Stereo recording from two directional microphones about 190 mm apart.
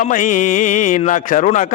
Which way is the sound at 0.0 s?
45° left (ahead or behind).